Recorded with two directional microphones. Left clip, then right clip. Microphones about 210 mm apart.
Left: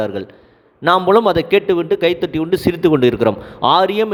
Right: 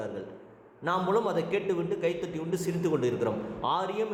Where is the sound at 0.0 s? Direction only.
45° left (ahead or behind).